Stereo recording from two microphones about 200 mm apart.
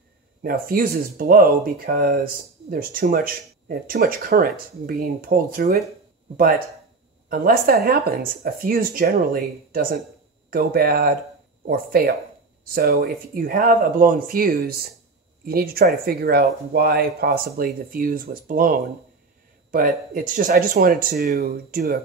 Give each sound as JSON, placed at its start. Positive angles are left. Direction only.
{"t": 0.4, "sound": "speech", "side_deg": -45}
{"t": 7.2, "sound": "speech", "side_deg": -45}